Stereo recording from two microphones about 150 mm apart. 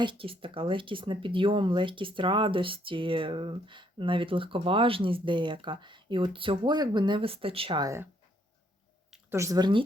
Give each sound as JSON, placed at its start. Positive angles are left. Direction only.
{"t": 0.0, "sound": "speech", "side_deg": -35}
{"t": 9.3, "sound": "a woman's voice", "side_deg": -20}